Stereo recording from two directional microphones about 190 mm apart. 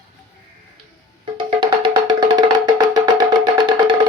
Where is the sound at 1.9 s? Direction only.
20° right (ahead or behind).